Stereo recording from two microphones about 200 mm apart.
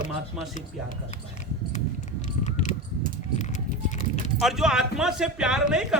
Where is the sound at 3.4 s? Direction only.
40° left (ahead or behind).